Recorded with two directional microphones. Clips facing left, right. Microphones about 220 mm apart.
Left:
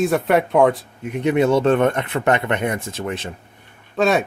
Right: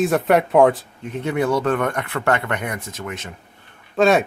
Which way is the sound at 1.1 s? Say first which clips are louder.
Left 4 dB; 15° left (ahead or behind).